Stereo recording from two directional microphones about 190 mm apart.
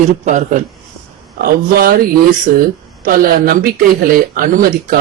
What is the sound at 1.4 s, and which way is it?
A man's voice, 55° right (ahead or behind).